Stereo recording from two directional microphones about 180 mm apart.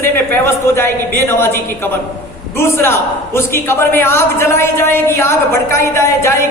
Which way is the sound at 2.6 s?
15° left (ahead or behind).